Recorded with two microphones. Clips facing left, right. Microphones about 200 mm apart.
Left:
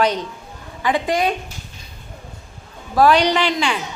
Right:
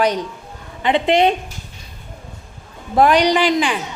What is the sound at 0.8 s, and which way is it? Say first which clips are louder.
Speech: right 4 dB; 25° right (ahead or behind).